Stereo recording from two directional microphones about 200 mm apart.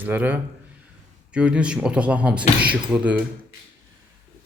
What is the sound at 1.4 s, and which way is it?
Speech, 5° right (ahead or behind).